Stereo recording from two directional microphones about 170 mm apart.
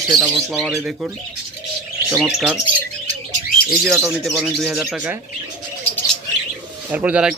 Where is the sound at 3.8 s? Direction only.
5° right (ahead or behind).